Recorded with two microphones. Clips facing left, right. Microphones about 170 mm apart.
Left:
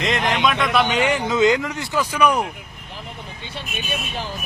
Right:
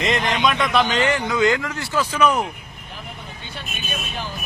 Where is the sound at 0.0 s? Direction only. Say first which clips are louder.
Even; centre (ahead or behind).